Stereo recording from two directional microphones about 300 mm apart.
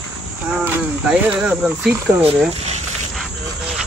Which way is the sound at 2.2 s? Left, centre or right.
Right.